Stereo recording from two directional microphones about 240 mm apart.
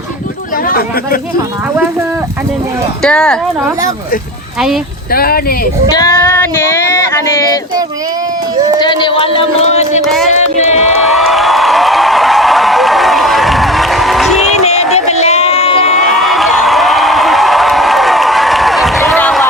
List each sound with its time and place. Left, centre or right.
0.7 s speech: left
3.0 s speech: centre
5.1 s speech: left
5.9 s child singing: centre
8.8 s speech: centre
10.3 s a sound: left
11.0 s a sound: centre
14.9 s run: left
16.0 s a sound: centre